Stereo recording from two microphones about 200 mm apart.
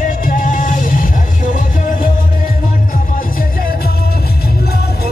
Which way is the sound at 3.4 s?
45° left (ahead or behind).